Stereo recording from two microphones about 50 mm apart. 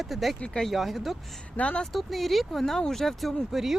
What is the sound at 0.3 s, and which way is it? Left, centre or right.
Speech, left.